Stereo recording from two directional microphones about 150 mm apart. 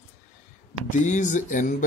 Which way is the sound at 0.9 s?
55° left (ahead or behind).